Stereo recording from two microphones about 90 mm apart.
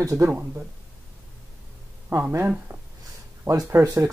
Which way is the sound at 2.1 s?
30° right (ahead or behind).